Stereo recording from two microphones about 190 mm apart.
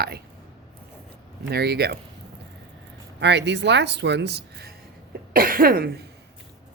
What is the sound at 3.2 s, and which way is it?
Speech, 65° right (ahead or behind).